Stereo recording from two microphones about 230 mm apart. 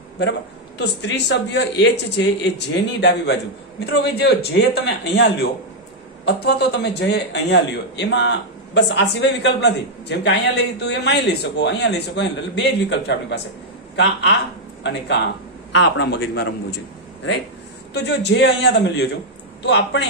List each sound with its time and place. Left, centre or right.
0.2 s a man's voice: left
17.9 s a man's voice: left